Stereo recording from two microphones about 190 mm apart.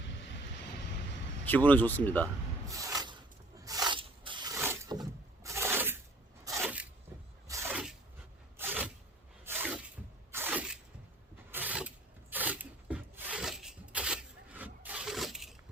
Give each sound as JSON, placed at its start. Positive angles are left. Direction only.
{"t": 0.0, "sound": "vehicle", "side_deg": 70}
{"t": 1.5, "sound": "a man's voice", "side_deg": 10}
{"t": 2.7, "sound": "a sound", "side_deg": -20}
{"t": 7.4, "sound": "sneeze", "side_deg": -15}
{"t": 8.5, "sound": "zipper", "side_deg": -10}
{"t": 9.4, "sound": "a sound", "side_deg": -10}
{"t": 11.5, "sound": "filing", "side_deg": -10}